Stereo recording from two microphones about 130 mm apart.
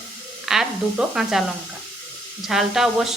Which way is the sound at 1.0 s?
5° right (ahead or behind).